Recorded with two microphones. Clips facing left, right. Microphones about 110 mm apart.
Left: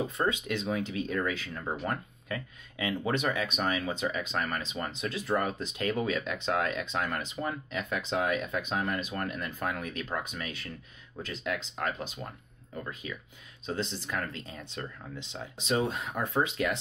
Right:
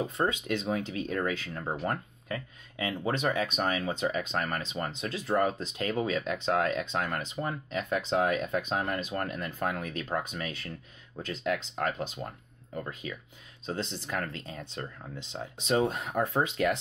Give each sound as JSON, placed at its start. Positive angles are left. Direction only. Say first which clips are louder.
{"t": 0.2, "sound": "speech", "louder": "right 1 dB", "side_deg": -35}